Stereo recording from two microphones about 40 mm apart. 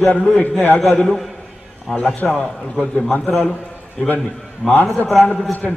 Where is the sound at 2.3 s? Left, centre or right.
Centre.